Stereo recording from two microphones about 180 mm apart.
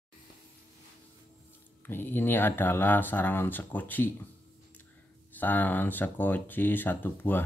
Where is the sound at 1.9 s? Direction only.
10° left (ahead or behind).